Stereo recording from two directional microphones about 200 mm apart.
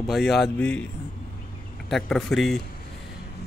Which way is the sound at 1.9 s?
Centre (ahead or behind).